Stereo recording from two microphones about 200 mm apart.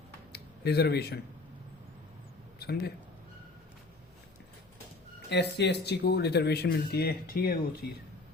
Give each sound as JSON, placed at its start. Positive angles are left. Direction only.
{"t": 0.3, "sound": "speech", "side_deg": 55}
{"t": 2.6, "sound": "speech", "side_deg": 50}
{"t": 5.3, "sound": "speech", "side_deg": 55}